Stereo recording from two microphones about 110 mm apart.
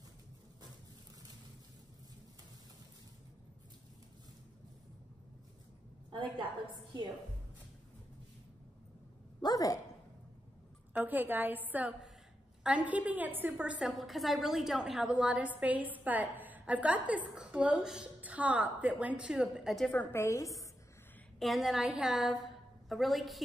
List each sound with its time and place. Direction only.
6.0 s a woman's voice: 50° right (ahead or behind)
9.4 s a sound: 35° left (ahead or behind)
10.9 s a woman's voice: 15° right (ahead or behind)
19.9 s a woman's voice: 20° left (ahead or behind)
21.4 s a woman's voice: centre (ahead or behind)